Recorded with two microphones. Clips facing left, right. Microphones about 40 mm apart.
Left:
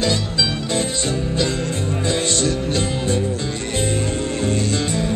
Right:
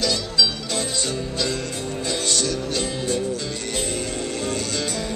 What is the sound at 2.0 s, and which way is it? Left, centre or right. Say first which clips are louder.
Music: left 4 dB; left.